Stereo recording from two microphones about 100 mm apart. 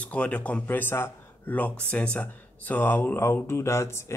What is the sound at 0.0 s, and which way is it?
A man's voice, 15° left (ahead or behind).